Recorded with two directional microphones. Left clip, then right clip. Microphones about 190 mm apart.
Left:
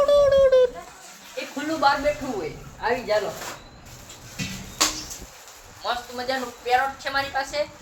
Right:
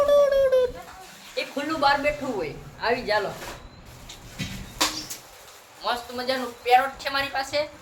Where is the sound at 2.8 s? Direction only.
20° right (ahead or behind).